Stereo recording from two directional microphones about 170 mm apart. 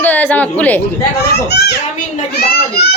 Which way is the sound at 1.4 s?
75° left (ahead or behind).